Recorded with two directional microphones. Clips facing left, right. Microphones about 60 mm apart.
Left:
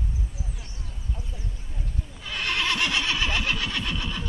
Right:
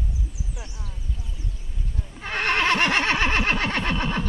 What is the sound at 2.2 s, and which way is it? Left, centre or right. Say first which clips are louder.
Neigh: right 5 dB; right.